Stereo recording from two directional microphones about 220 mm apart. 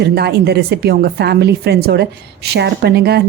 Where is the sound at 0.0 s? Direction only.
50° right (ahead or behind).